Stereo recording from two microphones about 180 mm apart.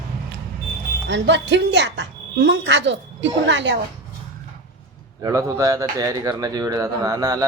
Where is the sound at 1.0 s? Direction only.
80° right.